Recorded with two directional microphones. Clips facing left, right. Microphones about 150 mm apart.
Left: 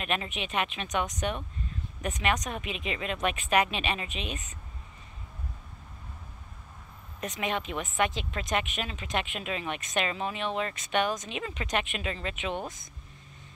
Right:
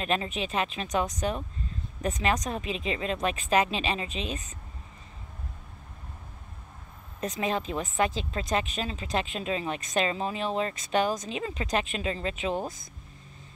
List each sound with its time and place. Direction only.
0.0 s speech: 30° right (ahead or behind)
7.2 s speech: 30° right (ahead or behind)